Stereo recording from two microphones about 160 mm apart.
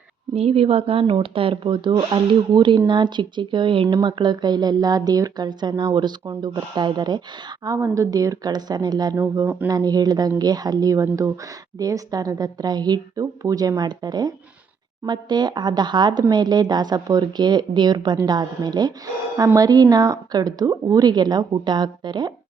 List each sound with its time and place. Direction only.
0.3 s speech: 40° right (ahead or behind)